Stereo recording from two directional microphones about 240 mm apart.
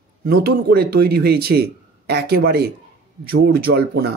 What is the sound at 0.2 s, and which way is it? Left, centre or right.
A man's voice, right.